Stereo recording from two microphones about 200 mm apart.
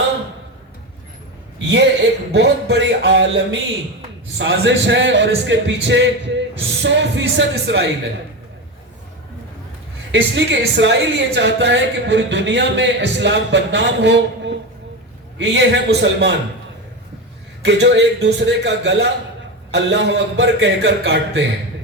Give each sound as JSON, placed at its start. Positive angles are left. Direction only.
{"t": 2.3, "sound": "a woman's voice", "side_deg": -60}
{"t": 10.1, "sound": "a woman's voice", "side_deg": -65}
{"t": 17.6, "sound": "a woman's voice", "side_deg": -60}